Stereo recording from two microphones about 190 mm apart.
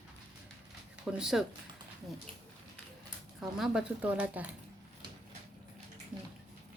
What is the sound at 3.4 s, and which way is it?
Speech, 5° right (ahead or behind).